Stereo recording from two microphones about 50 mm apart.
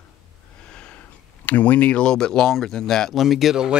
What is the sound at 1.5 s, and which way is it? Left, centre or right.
Speech, left.